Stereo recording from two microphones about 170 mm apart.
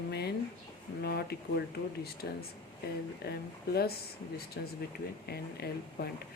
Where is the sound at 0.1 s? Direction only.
70° left (ahead or behind).